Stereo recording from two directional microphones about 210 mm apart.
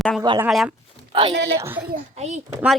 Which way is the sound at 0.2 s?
15° right (ahead or behind).